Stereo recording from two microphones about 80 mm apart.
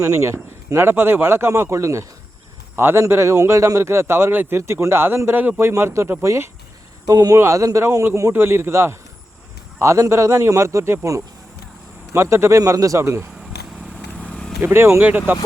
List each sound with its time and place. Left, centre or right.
0.0 s a man's voice: right
7.1 s a man's voice: right
13.0 s a man's voice: right
13.9 s vehicle: centre
14.6 s speech: right